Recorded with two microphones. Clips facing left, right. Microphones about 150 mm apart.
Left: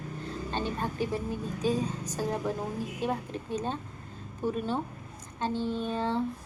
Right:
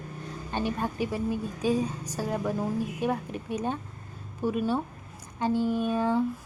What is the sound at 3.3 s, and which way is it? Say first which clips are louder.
A woman's voice: right 2 dB; 15° right (ahead or behind).